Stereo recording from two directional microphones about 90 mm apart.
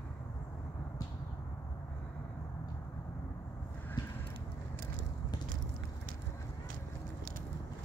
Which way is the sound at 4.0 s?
55° left (ahead or behind).